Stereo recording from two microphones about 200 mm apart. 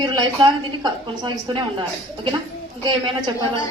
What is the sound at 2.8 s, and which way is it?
Speech, 20° right (ahead or behind).